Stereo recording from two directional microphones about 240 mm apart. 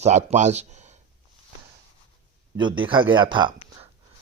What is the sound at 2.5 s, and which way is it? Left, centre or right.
Speech, centre.